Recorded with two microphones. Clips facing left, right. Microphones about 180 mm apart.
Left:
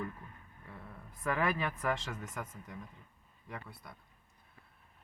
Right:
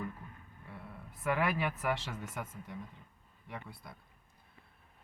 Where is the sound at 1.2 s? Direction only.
5° right (ahead or behind).